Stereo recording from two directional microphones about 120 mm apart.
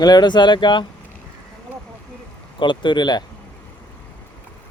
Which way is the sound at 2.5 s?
40° left (ahead or behind).